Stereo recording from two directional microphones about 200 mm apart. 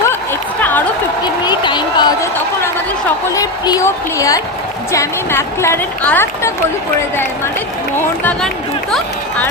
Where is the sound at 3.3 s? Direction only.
15° left (ahead or behind).